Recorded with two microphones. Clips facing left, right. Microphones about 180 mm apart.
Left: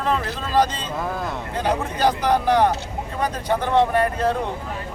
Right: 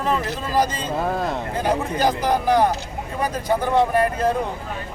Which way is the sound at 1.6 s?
10° right (ahead or behind).